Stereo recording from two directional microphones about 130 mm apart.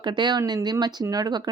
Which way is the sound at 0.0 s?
35° right (ahead or behind).